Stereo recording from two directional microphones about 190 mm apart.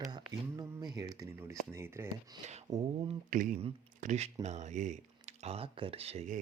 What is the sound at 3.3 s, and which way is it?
Speech, 45° right (ahead or behind).